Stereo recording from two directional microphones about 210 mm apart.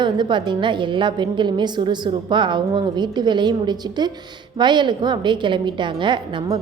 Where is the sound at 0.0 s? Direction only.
20° right (ahead or behind).